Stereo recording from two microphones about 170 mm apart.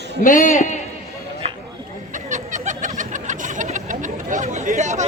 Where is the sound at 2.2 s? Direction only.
45° right (ahead or behind).